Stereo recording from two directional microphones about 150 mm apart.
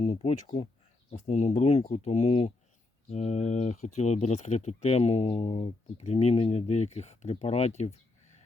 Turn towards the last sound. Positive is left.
turn(degrees=45)  # may be behind; listen again after turning